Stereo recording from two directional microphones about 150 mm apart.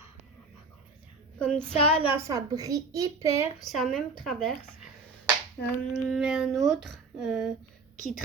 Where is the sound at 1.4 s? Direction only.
5° left (ahead or behind).